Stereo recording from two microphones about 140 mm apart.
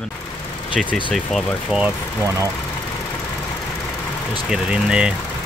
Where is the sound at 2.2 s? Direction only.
20° right (ahead or behind).